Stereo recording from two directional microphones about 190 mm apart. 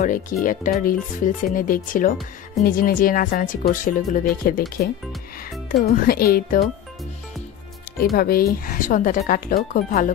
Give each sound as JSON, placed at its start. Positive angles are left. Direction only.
{"t": 0.0, "sound": "speech", "side_deg": 45}
{"t": 8.0, "sound": "speech", "side_deg": 50}